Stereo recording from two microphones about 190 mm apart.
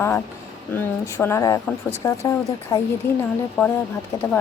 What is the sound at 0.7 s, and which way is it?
A woman's voice, 15° left (ahead or behind).